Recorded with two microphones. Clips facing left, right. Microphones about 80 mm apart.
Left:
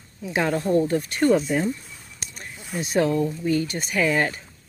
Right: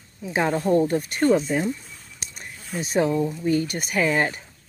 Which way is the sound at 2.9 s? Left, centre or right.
Centre.